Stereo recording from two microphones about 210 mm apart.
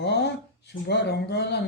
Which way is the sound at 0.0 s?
55° left (ahead or behind).